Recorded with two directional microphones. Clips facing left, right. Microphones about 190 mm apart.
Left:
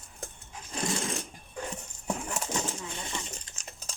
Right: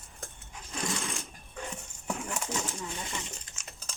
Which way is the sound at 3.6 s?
35° left (ahead or behind).